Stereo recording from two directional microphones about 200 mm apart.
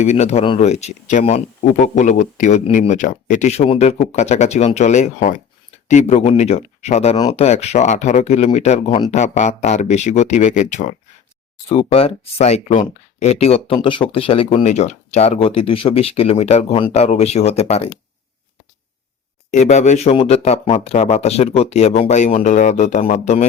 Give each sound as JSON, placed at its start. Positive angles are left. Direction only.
{"t": 0.0, "sound": "speech", "side_deg": 35}
{"t": 19.5, "sound": "speech", "side_deg": 35}